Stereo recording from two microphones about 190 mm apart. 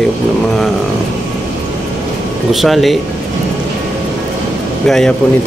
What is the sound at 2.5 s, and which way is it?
Speech, centre (ahead or behind).